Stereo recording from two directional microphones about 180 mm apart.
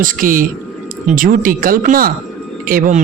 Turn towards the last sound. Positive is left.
turn(degrees=-40)  # may be behind; listen again after turning